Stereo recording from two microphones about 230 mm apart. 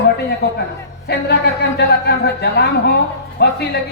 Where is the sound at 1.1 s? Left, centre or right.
Left.